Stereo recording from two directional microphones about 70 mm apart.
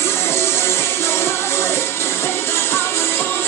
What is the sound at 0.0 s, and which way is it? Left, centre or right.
Music, left.